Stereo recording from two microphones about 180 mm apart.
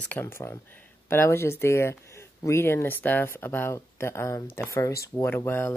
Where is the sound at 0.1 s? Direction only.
15° left (ahead or behind).